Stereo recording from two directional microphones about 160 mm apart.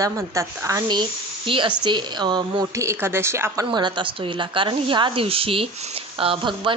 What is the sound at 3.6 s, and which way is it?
Speech, 30° right (ahead or behind).